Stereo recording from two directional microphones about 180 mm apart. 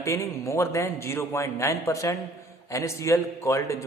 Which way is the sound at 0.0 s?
15° left (ahead or behind).